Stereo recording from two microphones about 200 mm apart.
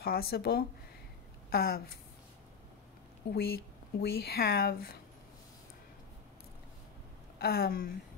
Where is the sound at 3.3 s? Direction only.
50° left (ahead or behind).